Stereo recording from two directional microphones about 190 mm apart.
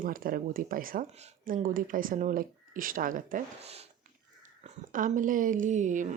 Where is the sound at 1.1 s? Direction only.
35° right (ahead or behind).